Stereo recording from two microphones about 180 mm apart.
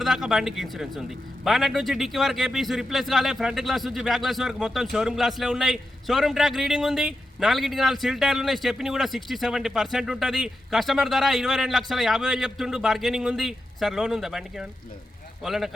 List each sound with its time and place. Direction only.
0.0 s a man's voice: centre (ahead or behind)